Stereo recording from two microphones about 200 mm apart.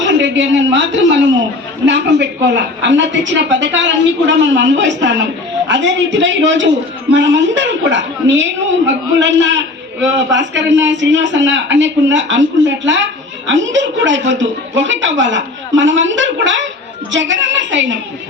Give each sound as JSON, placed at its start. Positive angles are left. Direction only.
{"t": 0.0, "sound": "a woman's voice", "side_deg": -65}